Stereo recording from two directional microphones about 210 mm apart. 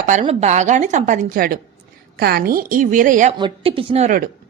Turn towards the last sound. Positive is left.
turn(degrees=-30)  # may be behind; listen again after turning